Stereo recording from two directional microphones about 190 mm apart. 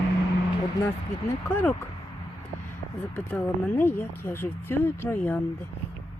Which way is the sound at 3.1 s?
10° left (ahead or behind).